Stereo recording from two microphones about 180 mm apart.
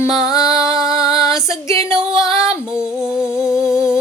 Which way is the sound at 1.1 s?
20° left (ahead or behind).